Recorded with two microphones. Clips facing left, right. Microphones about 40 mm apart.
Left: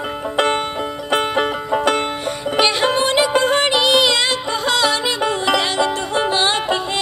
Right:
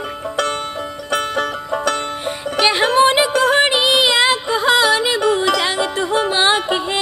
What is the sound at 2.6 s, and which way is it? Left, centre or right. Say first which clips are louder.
Music: right 4 dB; centre.